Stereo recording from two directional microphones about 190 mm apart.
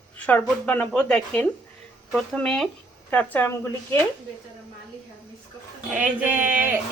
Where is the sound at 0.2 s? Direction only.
10° left (ahead or behind).